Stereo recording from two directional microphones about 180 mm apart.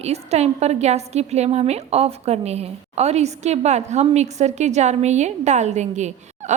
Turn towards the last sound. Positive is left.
turn(degrees=-40)  # may be behind; listen again after turning